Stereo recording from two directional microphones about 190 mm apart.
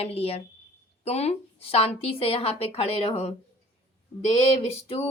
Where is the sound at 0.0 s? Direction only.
30° left (ahead or behind).